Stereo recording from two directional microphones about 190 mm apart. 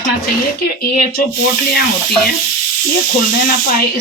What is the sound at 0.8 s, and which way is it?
Speech, 55° left (ahead or behind).